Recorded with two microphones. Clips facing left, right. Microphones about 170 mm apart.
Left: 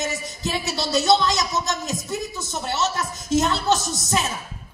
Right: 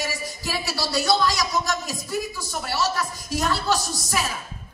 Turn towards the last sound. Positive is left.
turn(degrees=20)  # may be behind; listen again after turning